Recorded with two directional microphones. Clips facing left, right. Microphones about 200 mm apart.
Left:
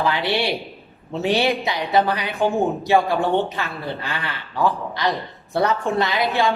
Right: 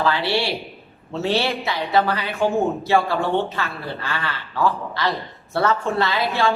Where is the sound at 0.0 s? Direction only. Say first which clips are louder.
Even; 15° left (ahead or behind).